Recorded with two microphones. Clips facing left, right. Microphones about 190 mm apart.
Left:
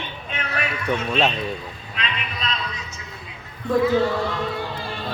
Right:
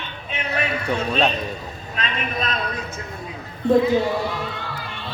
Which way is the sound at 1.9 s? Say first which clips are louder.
Right 5 dB; 45° right (ahead or behind).